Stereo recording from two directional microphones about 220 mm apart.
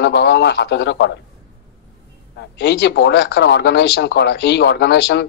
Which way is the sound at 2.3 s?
50° left (ahead or behind).